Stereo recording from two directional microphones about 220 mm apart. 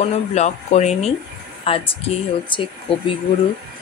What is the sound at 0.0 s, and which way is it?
Speech, 30° left (ahead or behind).